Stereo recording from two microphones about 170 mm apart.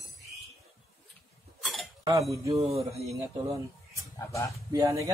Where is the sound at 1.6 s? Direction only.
Centre (ahead or behind).